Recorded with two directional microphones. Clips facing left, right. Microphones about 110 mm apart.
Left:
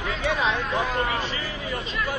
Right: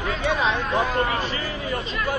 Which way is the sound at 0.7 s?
45° right (ahead or behind).